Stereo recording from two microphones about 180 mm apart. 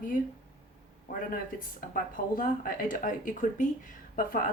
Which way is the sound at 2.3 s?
50° left (ahead or behind).